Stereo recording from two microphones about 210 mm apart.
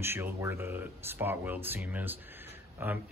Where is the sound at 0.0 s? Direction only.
10° right (ahead or behind).